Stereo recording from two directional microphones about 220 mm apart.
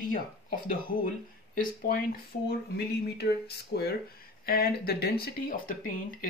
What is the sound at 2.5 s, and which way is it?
Speech, 45° left (ahead or behind).